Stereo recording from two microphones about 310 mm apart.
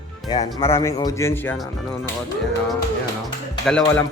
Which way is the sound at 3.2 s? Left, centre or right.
Centre.